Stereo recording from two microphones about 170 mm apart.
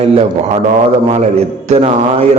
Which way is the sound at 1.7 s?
35° right (ahead or behind).